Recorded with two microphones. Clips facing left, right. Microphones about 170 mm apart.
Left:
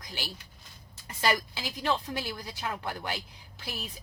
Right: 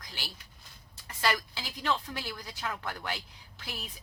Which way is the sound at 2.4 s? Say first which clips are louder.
Left 2 dB; 15° left (ahead or behind).